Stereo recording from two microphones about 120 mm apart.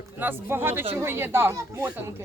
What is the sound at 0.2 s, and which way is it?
Speech, 20° right (ahead or behind).